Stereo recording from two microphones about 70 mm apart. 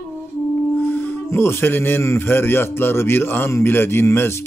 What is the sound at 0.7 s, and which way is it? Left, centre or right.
Speech, left.